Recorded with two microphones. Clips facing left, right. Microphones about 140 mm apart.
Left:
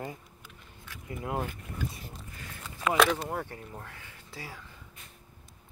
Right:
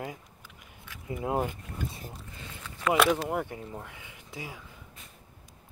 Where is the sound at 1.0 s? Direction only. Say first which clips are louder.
Right 4 dB; 25° right (ahead or behind).